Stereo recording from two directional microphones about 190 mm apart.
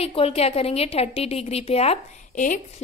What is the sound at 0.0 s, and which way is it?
A woman's voice, 30° left (ahead or behind).